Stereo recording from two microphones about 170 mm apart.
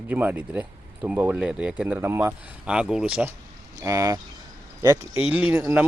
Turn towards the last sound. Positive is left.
turn(degrees=-10)  # may be behind; listen again after turning